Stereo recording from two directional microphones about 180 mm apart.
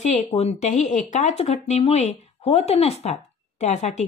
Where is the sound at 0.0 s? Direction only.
40° left (ahead or behind).